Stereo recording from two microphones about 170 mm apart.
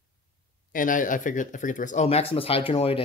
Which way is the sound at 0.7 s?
50° left (ahead or behind).